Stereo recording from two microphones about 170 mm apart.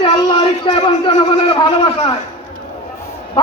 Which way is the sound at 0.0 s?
30° left (ahead or behind).